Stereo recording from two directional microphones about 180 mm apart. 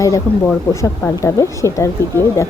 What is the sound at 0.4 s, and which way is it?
Speech, 15° left (ahead or behind).